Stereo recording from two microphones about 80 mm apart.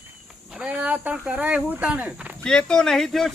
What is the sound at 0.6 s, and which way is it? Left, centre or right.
Speech, centre.